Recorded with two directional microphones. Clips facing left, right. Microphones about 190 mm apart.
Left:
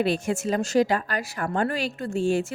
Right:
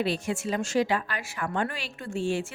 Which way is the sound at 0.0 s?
50° left (ahead or behind).